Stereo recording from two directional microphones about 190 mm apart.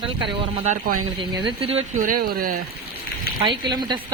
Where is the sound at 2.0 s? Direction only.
50° right (ahead or behind).